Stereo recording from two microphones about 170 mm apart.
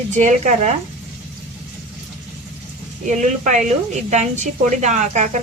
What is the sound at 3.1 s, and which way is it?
A woman's voice, 45° right (ahead or behind).